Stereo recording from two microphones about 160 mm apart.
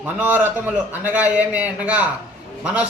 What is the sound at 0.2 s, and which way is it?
A man's voice, 10° right (ahead or behind).